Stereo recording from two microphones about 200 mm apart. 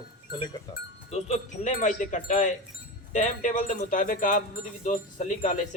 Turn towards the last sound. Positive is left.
turn(degrees=40)  # may be behind; listen again after turning